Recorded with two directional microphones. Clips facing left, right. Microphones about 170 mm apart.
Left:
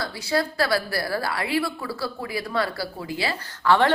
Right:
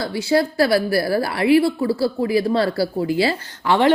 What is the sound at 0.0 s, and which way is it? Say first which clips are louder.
Speech: right 7 dB; 25° right (ahead or behind).